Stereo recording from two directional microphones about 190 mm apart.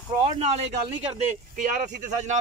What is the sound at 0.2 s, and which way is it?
A man's voice, 35° right (ahead or behind).